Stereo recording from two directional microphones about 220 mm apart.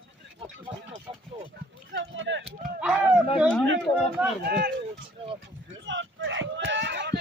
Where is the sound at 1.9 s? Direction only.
60° right (ahead or behind).